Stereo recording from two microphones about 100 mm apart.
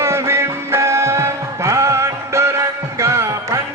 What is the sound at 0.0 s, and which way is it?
Music, 25° right (ahead or behind).